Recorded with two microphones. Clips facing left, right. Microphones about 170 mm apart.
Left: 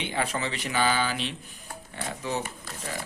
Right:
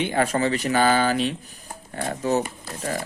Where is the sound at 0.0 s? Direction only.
45° right (ahead or behind).